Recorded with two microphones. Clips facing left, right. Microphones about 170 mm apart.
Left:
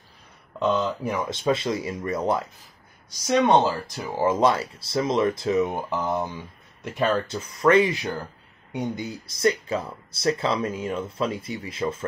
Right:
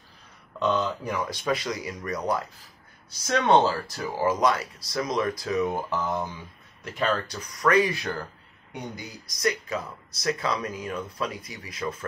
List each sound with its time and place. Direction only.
0.6 s speech: 10° left (ahead or behind)
1.3 s speech: 25° left (ahead or behind)
3.3 s speech: 15° left (ahead or behind)
4.3 s speech: 30° left (ahead or behind)